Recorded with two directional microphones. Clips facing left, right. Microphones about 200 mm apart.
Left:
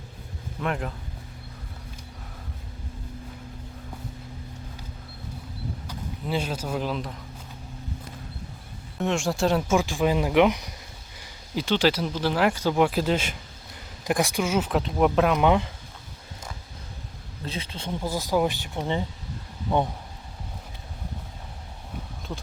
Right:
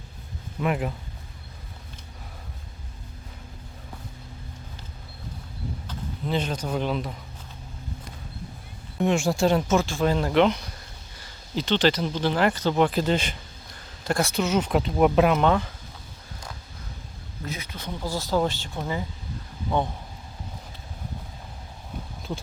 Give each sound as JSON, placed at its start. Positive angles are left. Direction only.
{"t": 0.6, "sound": "speech", "side_deg": -5}
{"t": 5.9, "sound": "speech", "side_deg": 10}
{"t": 9.0, "sound": "speech", "side_deg": 0}
{"t": 9.7, "sound": "speech", "side_deg": 15}
{"t": 14.0, "sound": "speech", "side_deg": 15}
{"t": 15.4, "sound": "speech", "side_deg": 15}
{"t": 17.4, "sound": "speech", "side_deg": 30}